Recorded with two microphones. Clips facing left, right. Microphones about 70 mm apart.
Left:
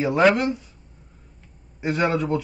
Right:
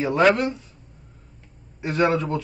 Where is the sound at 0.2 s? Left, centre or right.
Centre.